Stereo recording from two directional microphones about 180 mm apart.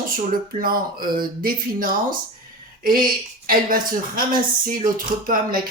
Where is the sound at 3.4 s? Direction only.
50° right (ahead or behind).